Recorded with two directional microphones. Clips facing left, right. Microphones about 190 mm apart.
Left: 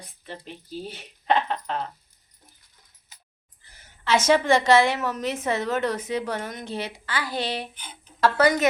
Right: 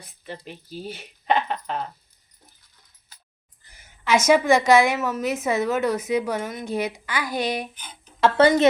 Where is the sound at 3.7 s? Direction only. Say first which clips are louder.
Right 2 dB; 10° right (ahead or behind).